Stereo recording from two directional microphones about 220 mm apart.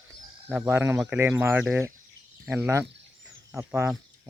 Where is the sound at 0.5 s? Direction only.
10° right (ahead or behind).